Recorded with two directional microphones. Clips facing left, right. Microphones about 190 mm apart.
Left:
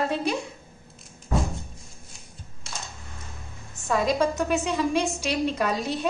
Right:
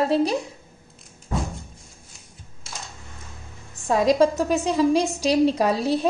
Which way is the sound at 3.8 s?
35° right (ahead or behind).